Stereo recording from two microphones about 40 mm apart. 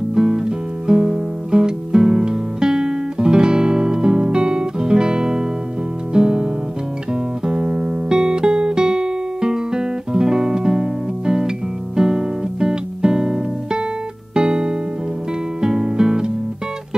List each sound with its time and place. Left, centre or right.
0.1 s music: centre